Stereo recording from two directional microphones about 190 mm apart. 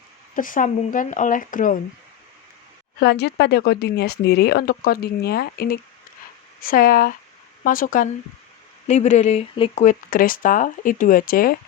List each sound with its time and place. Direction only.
0.3 s speech: 45° left (ahead or behind)
3.0 s speech: 60° left (ahead or behind)